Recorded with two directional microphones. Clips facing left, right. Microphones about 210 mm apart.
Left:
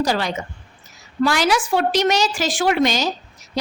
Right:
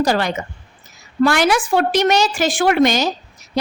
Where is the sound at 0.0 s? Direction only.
55° right (ahead or behind).